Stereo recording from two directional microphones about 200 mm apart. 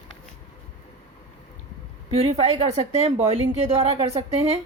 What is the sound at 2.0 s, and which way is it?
A woman's voice, 30° right (ahead or behind).